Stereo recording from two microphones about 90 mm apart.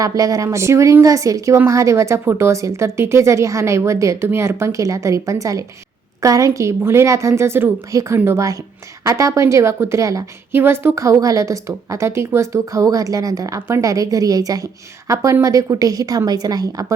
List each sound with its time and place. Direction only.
0.0 s a woman's voice: 40° right (ahead or behind)